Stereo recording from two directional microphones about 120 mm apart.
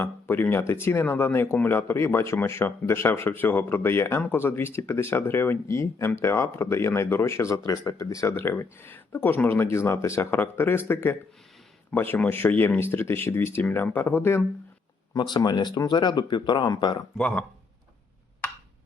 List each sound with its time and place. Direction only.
0.0 s speech: 15° left (ahead or behind)
15.1 s speech: 35° left (ahead or behind)
17.2 s speech: 10° left (ahead or behind)